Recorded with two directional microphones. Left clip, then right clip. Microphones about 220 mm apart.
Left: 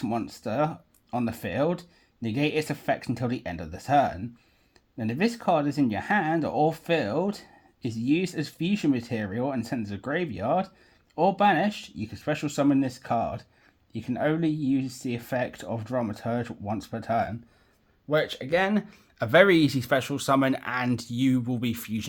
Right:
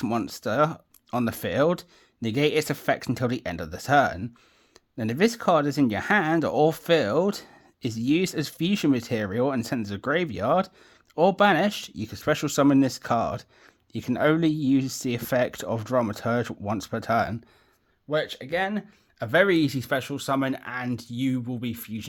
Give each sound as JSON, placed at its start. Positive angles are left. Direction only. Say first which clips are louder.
{"t": 0.0, "sound": "speech", "louder": "right 3 dB", "side_deg": -45}
{"t": 18.1, "sound": "speech", "louder": "left 2 dB", "side_deg": -5}